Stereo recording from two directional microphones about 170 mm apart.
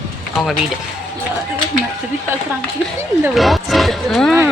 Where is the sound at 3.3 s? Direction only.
Centre (ahead or behind).